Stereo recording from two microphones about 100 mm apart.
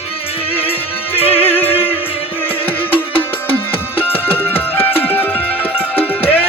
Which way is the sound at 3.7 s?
70° left (ahead or behind).